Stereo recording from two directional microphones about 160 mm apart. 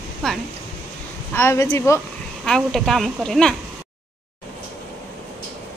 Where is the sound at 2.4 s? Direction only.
5° left (ahead or behind).